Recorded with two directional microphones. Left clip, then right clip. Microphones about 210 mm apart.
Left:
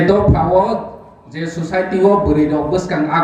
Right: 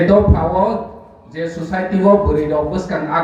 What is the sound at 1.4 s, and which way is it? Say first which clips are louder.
Speech: left 2 dB; 50° left (ahead or behind).